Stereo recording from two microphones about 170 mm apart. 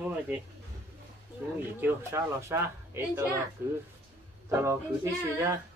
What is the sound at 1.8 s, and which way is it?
Speech, 15° right (ahead or behind).